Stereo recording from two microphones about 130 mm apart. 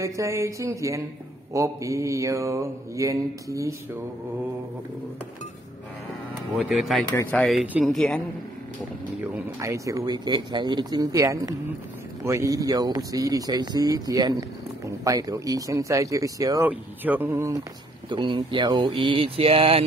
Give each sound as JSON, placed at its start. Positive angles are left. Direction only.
{"t": 0.0, "sound": "speech", "side_deg": -25}
{"t": 6.6, "sound": "speech", "side_deg": 0}
{"t": 9.2, "sound": "speech", "side_deg": -25}
{"t": 16.6, "sound": "speech", "side_deg": -15}
{"t": 18.1, "sound": "speech", "side_deg": -35}